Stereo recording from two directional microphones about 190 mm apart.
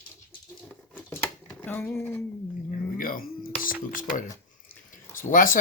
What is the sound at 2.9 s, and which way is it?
Music, 50° left (ahead or behind).